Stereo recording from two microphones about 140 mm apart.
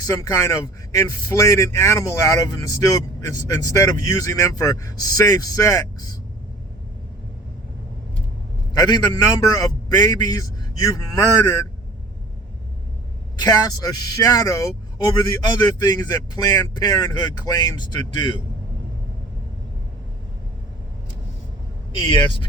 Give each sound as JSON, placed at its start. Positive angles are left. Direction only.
{"t": 0.0, "sound": "speech", "side_deg": 25}
{"t": 8.8, "sound": "speech", "side_deg": 30}
{"t": 13.4, "sound": "speech", "side_deg": 30}
{"t": 22.0, "sound": "speech", "side_deg": 35}